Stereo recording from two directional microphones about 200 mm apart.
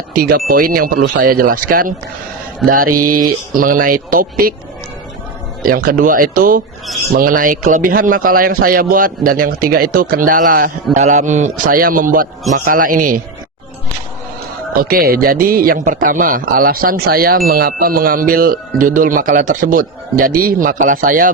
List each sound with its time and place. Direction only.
0.1 s a man's voice: 45° right (ahead or behind)
2.6 s a man's voice: 45° right (ahead or behind)
5.6 s a man's voice: 45° right (ahead or behind)
14.7 s a man's voice: 45° right (ahead or behind)